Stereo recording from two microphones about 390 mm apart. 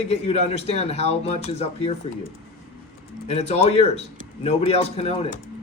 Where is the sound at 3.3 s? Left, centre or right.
Centre.